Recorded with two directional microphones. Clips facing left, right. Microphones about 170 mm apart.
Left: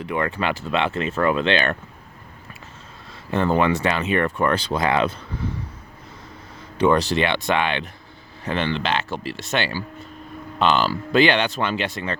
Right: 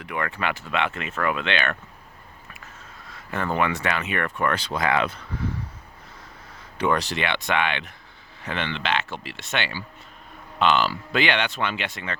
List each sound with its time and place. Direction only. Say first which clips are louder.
0.0 s speech: left 4 dB; 30° left (ahead or behind)
3.1 s speech: left 7 dB; 30° left (ahead or behind)
6.7 s speech: left 6 dB; 30° left (ahead or behind)